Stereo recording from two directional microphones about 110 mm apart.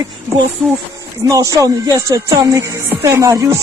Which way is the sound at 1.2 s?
30° right (ahead or behind).